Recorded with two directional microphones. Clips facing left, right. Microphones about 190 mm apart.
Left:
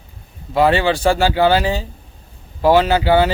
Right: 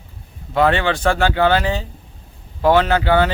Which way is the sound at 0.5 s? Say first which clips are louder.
Left 2 dB; 10° left (ahead or behind).